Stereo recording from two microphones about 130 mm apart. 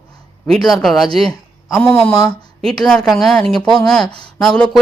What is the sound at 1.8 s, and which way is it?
Speech, 15° left (ahead or behind).